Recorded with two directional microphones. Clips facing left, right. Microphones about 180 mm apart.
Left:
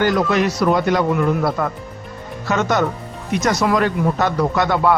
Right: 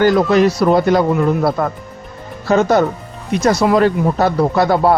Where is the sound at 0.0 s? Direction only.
35° right (ahead or behind).